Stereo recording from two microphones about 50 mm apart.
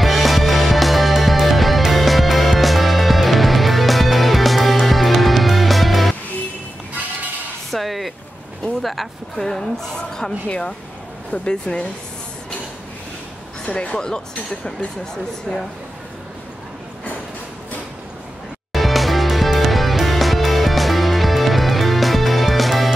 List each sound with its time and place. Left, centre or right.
0.0 s music: centre
7.7 s a sound: centre
11.3 s speech: centre
13.7 s speech: left
18.7 s music: centre